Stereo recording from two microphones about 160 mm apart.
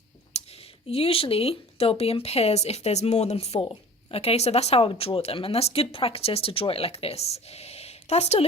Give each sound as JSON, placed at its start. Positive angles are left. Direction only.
{"t": 0.3, "sound": "speech", "side_deg": 40}